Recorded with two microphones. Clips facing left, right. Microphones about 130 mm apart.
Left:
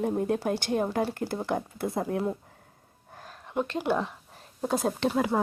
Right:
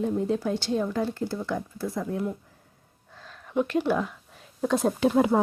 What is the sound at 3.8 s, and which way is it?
Speech, 25° left (ahead or behind).